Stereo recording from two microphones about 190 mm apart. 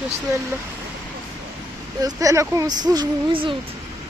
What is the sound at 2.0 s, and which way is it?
Speech, 15° right (ahead or behind).